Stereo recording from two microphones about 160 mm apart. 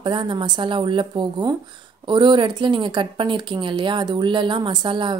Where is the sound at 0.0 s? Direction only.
30° right (ahead or behind).